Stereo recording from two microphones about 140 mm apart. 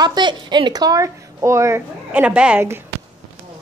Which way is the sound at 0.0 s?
30° right (ahead or behind).